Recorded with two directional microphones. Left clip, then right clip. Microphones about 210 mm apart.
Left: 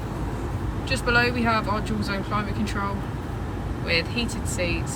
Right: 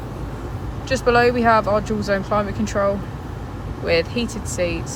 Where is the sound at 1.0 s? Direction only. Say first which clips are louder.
Right 7 dB; 10° right (ahead or behind).